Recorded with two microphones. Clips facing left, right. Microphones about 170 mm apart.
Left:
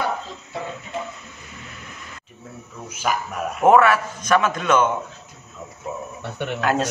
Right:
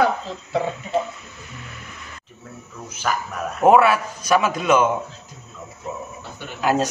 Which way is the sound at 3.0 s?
10° left (ahead or behind).